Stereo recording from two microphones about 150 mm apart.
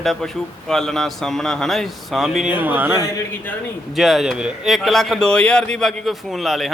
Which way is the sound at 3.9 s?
Centre (ahead or behind).